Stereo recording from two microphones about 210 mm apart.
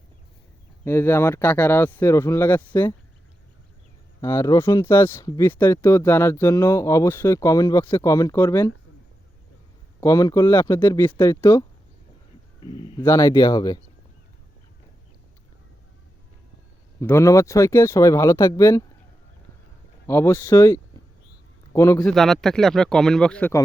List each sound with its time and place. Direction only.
0.9 s speech: 10° left (ahead or behind)
4.2 s speech: 15° left (ahead or behind)
10.0 s speech: 15° left (ahead or behind)
12.6 s speech: 20° left (ahead or behind)
17.0 s speech: 10° left (ahead or behind)
20.1 s a man's voice: 10° left (ahead or behind)
22.0 s speech: centre (ahead or behind)